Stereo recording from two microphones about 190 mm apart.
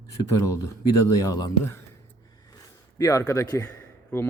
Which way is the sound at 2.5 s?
20° left (ahead or behind).